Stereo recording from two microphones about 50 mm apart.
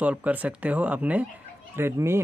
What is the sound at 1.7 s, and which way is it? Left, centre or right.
Speech, right.